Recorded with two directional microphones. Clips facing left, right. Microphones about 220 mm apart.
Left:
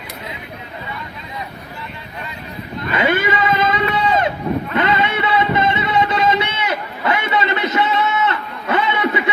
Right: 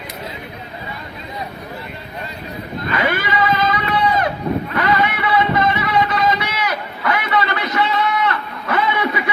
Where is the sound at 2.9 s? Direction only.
25° left (ahead or behind).